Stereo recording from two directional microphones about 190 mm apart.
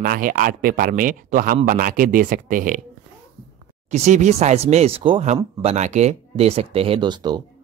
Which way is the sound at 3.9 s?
40° right (ahead or behind).